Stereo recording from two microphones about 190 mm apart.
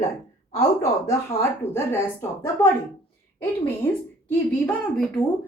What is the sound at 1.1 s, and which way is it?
Speech, 15° left (ahead or behind).